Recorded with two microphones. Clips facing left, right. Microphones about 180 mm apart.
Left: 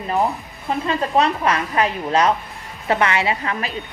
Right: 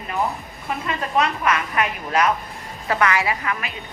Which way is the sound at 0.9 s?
30° left (ahead or behind).